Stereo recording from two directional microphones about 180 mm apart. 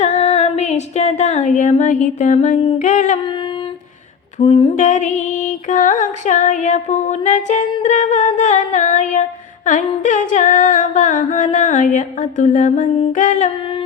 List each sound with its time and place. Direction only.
0.0 s female singing: 40° left (ahead or behind)
2.7 s humming: 45° left (ahead or behind)
4.4 s a sound: 30° left (ahead or behind)
4.7 s humming: 45° left (ahead or behind)